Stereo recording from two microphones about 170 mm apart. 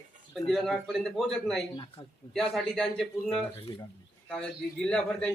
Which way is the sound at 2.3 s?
Centre (ahead or behind).